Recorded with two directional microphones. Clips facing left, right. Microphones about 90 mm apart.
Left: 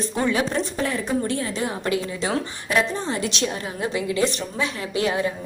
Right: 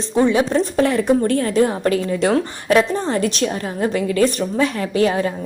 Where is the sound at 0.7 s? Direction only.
70° right (ahead or behind).